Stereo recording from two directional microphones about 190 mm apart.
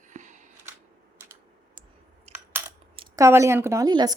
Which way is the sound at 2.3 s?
35° right (ahead or behind).